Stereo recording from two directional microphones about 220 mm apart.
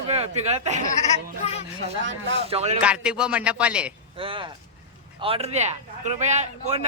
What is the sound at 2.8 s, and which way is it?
A man's voice, 5° right (ahead or behind).